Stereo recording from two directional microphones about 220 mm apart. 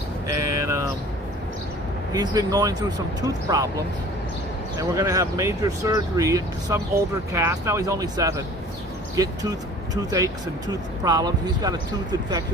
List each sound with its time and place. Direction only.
0.3 s a sound: 15° right (ahead or behind)
2.1 s speech: 15° right (ahead or behind)
4.8 s speech: 15° right (ahead or behind)